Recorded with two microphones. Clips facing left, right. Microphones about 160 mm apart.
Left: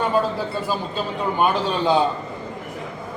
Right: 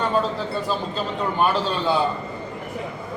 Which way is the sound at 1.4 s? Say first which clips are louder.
Left 2 dB; 15° left (ahead or behind).